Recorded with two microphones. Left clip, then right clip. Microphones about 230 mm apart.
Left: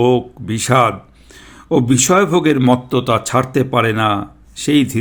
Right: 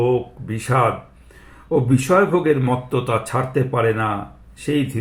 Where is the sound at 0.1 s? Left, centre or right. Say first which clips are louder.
Left 5 dB; left.